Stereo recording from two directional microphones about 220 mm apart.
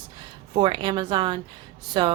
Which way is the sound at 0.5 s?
20° right (ahead or behind).